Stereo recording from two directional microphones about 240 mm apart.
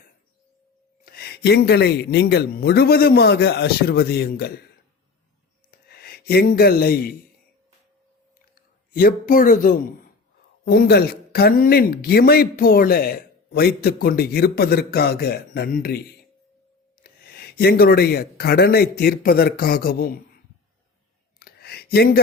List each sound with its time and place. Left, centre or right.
1.0 s a man's voice: left
5.7 s speech: left
8.5 s a man's voice: left
17.0 s speech: left
21.3 s a sound: left